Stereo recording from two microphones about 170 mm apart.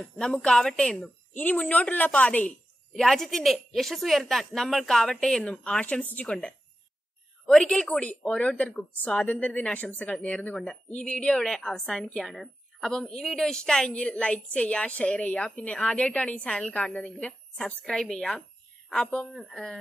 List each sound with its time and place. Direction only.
0.2 s a woman's voice: 5° left (ahead or behind)